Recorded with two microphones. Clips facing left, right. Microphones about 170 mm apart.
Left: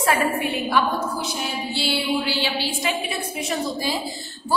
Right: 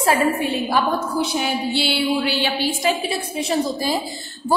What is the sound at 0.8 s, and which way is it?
Speech, 40° right (ahead or behind).